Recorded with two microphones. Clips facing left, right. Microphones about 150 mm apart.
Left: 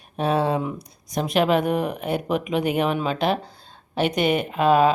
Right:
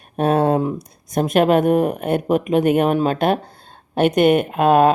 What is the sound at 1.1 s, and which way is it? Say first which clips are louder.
Speech: right 5 dB; 50° right (ahead or behind).